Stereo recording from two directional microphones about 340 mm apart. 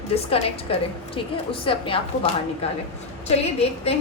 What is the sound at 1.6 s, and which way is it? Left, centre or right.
Speech, centre.